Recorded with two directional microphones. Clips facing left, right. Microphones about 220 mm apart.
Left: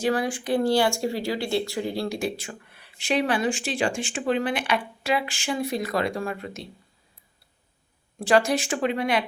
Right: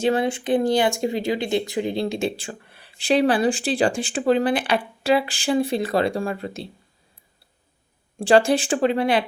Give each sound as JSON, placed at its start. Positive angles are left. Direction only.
{"t": 0.0, "sound": "speech", "side_deg": -25}
{"t": 8.2, "sound": "speech", "side_deg": -30}